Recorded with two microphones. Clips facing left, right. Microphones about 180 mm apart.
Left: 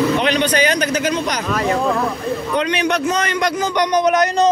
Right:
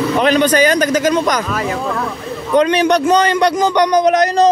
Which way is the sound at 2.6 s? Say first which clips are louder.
Right 8 dB; 40° right (ahead or behind).